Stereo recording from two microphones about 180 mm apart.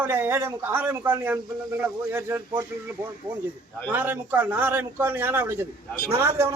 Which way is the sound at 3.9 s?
10° right (ahead or behind).